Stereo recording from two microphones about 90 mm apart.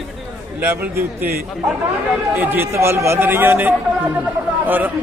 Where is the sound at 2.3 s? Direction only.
25° right (ahead or behind).